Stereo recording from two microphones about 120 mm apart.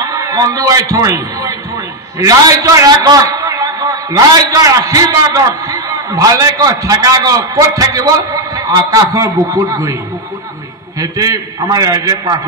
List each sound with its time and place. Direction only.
0.0 s a man's voice: 30° right (ahead or behind)
11.0 s a man's voice: 30° right (ahead or behind)